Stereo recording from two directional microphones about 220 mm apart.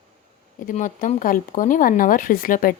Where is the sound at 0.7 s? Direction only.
35° left (ahead or behind).